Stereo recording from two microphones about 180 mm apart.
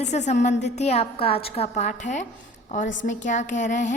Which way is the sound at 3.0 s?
45° left (ahead or behind).